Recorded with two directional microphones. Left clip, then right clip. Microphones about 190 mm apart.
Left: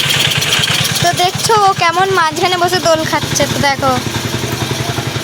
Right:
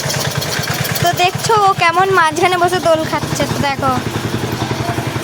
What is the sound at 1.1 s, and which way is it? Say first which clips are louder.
Speech: even; centre (ahead or behind).